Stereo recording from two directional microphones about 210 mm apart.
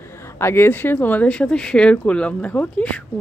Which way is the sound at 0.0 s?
10° left (ahead or behind).